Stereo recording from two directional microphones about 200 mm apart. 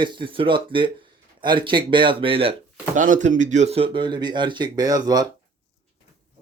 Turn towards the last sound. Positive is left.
turn(degrees=-20)  # may be behind; listen again after turning